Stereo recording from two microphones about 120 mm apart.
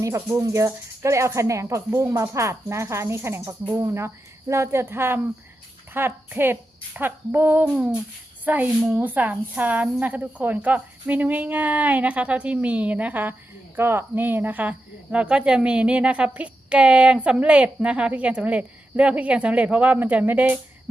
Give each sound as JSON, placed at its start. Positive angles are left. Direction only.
{"t": 0.0, "sound": "speech", "side_deg": -25}